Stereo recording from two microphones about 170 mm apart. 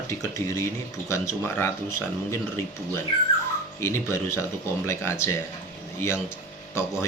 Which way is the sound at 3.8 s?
15° left (ahead or behind).